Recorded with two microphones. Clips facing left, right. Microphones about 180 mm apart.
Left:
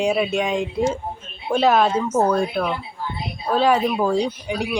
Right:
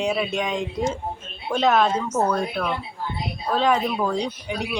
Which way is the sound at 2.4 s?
10° left (ahead or behind).